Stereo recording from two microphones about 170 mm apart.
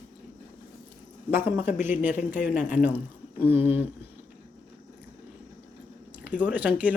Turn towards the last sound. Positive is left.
turn(degrees=-10)  # may be behind; listen again after turning